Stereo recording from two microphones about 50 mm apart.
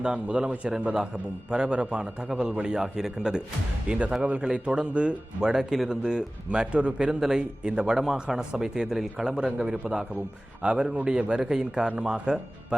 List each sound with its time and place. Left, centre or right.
0.0 s a man's voice: centre